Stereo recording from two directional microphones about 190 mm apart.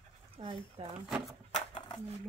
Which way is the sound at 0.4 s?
25° right (ahead or behind).